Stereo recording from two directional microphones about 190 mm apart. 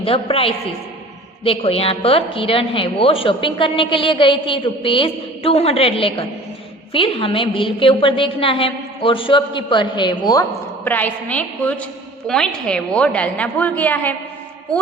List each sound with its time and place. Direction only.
0.0 s a woman's voice: 30° left (ahead or behind)
10.8 s a woman's voice: 10° left (ahead or behind)